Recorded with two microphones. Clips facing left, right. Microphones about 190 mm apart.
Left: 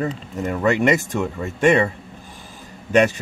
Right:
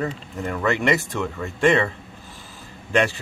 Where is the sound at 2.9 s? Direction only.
20° left (ahead or behind).